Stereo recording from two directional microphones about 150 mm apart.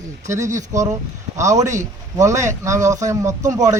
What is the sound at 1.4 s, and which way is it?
A man's voice, 20° right (ahead or behind).